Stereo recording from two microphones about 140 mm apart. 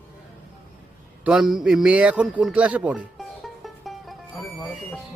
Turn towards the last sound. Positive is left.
turn(degrees=0)  # may be behind; listen again after turning